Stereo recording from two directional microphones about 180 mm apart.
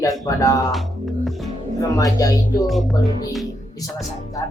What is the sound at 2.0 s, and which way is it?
Speech, 20° left (ahead or behind).